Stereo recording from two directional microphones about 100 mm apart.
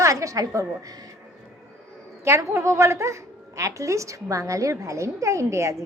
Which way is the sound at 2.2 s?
30° right (ahead or behind).